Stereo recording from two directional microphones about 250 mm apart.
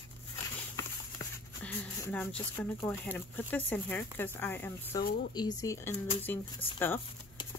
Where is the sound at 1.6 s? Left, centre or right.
Centre.